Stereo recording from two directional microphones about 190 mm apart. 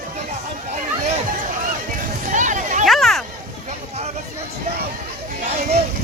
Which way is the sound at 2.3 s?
40° right (ahead or behind).